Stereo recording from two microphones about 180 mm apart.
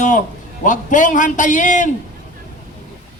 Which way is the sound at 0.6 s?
45° left (ahead or behind).